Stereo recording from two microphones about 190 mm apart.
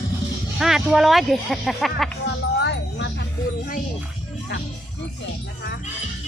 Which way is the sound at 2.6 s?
65° left (ahead or behind).